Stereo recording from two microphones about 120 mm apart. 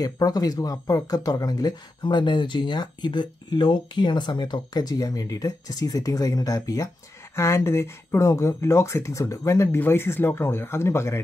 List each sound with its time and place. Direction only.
0.0 s speech: 30° left (ahead or behind)